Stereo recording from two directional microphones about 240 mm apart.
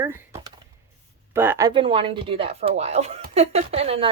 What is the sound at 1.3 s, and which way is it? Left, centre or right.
A woman's voice, centre.